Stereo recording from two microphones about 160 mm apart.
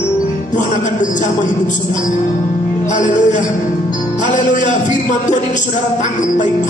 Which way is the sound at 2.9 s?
50° left (ahead or behind).